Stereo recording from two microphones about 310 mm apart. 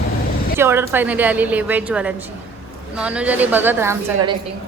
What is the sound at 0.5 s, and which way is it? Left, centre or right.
Speech, centre.